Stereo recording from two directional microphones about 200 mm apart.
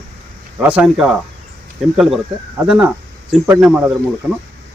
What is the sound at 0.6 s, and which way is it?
Speech, 5° right (ahead or behind).